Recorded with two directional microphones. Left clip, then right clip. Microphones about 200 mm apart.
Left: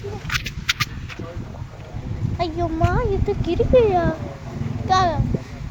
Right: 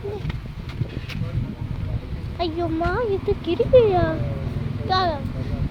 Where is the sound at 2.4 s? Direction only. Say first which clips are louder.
Left 1 dB; 5° right (ahead or behind).